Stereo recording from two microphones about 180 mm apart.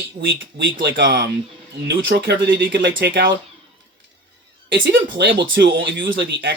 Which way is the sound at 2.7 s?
60° right (ahead or behind).